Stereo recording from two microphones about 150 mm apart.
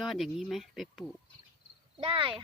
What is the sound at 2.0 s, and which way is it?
Speech, 35° right (ahead or behind).